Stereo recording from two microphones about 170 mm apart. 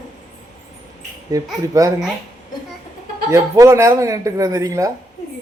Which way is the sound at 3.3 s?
20° right (ahead or behind).